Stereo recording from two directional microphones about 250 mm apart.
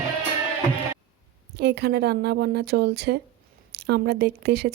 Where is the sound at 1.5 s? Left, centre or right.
Right.